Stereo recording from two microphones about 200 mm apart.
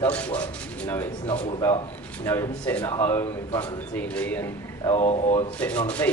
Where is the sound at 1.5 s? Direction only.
20° left (ahead or behind).